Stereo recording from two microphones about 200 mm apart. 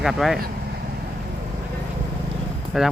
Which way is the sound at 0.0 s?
Centre (ahead or behind).